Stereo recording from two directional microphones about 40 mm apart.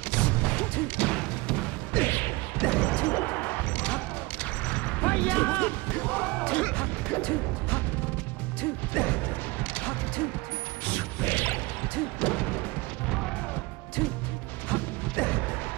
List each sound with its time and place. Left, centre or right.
0.1 s smash: left
1.0 s music: centre
2.0 s smash: left
2.6 s smash: left
3.3 s fusillade: left
3.7 s fusillade: left
4.6 s a sound: left
5.0 s music: left
8.9 s mechanisms: left
9.8 s music: left
10.9 s smash: left
14.7 s mechanisms: left